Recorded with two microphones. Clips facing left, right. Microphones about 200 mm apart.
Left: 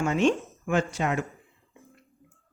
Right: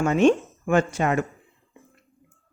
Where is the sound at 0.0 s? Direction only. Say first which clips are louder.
Right 5 dB; 50° right (ahead or behind).